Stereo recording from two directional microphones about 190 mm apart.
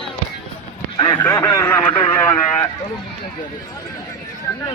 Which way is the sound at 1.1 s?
10° left (ahead or behind).